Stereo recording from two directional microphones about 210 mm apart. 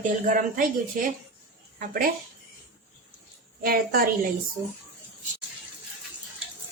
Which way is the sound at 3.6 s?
45° right (ahead or behind).